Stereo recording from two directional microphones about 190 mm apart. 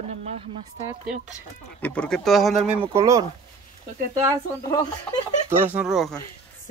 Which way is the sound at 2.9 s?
15° right (ahead or behind).